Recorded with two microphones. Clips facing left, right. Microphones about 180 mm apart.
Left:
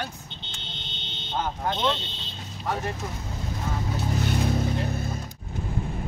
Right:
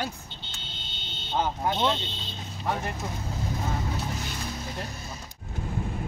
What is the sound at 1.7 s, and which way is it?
Speech, 10° right (ahead or behind).